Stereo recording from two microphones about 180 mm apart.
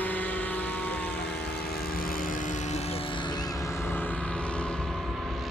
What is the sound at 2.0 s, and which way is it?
Vehicle, 50° left (ahead or behind).